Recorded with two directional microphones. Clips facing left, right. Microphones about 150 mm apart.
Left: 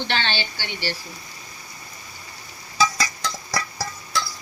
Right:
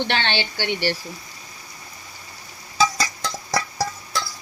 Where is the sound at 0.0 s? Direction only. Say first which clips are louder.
Right 3 dB; 60° right (ahead or behind).